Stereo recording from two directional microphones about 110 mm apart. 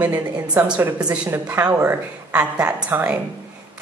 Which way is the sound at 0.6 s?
20° right (ahead or behind).